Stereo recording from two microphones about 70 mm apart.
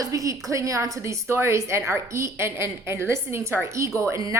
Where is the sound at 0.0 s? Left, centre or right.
Right.